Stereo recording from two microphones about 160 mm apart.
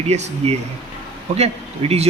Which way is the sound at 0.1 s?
45° right (ahead or behind).